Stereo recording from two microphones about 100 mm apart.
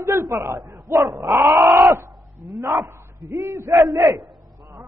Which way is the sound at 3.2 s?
35° right (ahead or behind).